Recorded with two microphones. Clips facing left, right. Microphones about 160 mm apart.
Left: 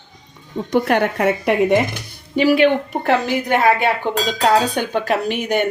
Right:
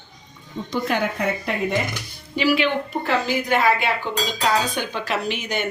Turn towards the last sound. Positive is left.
turn(degrees=55)  # may be behind; listen again after turning